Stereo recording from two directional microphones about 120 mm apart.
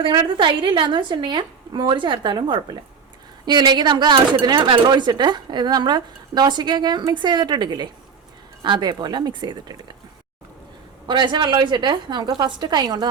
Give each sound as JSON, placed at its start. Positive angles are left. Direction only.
{"t": 0.0, "sound": "speech", "side_deg": -40}
{"t": 11.1, "sound": "speech", "side_deg": -40}